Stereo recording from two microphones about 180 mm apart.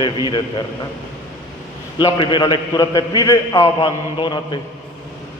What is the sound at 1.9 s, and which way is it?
A man's voice, 25° left (ahead or behind).